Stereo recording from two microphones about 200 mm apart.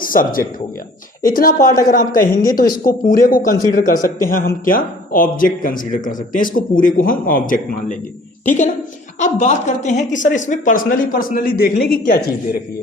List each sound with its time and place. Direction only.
0.0 s speech: 45° left (ahead or behind)